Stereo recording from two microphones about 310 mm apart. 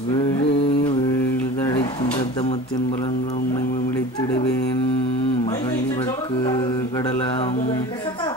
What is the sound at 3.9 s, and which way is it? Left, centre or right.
A capella, centre.